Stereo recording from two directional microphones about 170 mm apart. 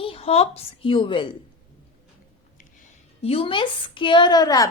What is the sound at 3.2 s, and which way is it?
A woman's voice, 35° left (ahead or behind).